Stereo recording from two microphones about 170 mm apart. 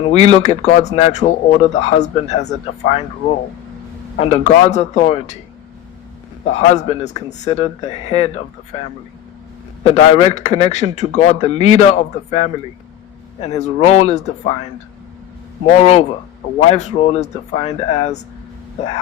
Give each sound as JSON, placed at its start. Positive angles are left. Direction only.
{"t": 0.1, "sound": "a man's voice", "side_deg": 40}
{"t": 4.2, "sound": "a man's voice", "side_deg": 35}
{"t": 6.4, "sound": "a man's voice", "side_deg": 40}
{"t": 9.8, "sound": "a man's voice", "side_deg": 40}
{"t": 15.7, "sound": "a man's voice", "side_deg": 40}